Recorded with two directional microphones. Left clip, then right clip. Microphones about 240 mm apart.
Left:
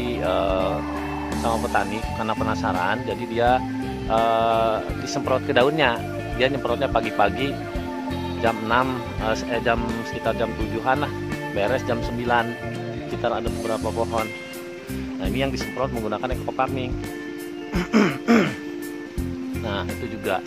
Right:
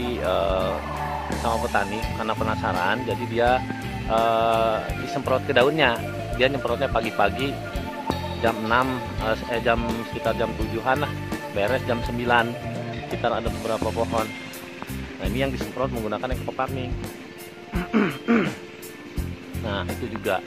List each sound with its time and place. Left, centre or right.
0.2 s speech: centre
15.2 s speech: centre
17.7 s music: left